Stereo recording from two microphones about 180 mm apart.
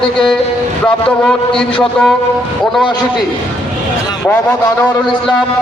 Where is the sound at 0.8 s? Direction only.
5° left (ahead or behind).